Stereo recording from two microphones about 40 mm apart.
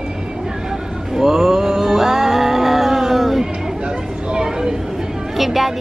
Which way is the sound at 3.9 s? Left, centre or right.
Right.